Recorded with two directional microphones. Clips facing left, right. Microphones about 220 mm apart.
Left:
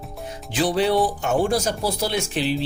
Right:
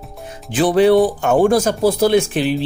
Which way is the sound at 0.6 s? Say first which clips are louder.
Right 8 dB; 55° right (ahead or behind).